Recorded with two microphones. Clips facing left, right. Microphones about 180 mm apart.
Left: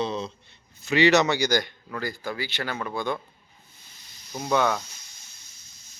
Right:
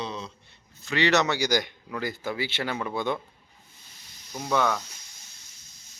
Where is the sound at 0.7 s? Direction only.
10° left (ahead or behind).